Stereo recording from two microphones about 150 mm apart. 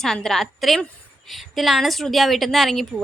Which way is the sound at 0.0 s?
5° left (ahead or behind).